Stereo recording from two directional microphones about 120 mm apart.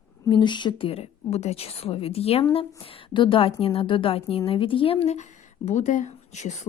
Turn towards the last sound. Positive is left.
turn(degrees=70)  # may be behind; listen again after turning